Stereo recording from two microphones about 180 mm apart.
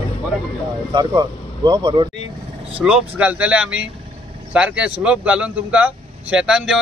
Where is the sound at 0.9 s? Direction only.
25° right (ahead or behind).